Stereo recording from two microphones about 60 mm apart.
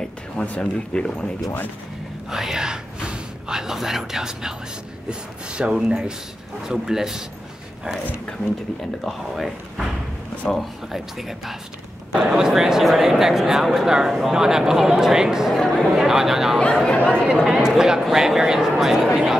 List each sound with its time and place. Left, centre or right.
0.5 s speech: centre
2.3 s whispering: centre
5.5 s speech: centre
9.0 s speech: centre
16.5 s speech: centre
17.5 s speech: centre